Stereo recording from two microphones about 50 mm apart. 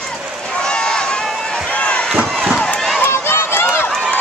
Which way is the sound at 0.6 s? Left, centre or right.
Centre.